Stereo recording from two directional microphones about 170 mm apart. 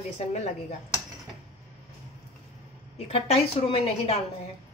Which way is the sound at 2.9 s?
35° left (ahead or behind).